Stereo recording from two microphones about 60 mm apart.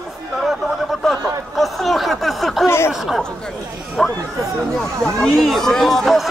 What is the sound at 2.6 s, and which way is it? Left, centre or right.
Snicker, left.